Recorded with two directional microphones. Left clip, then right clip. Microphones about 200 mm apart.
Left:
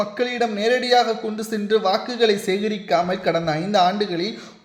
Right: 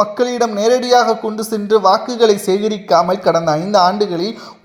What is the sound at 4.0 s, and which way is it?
Speech, 20° right (ahead or behind).